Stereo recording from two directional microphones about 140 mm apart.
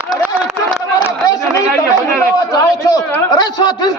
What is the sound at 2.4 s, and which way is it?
A man's voice, 25° left (ahead or behind).